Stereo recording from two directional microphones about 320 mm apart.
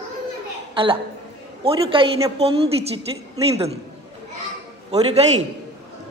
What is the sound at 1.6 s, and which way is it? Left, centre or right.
A woman's voice, centre.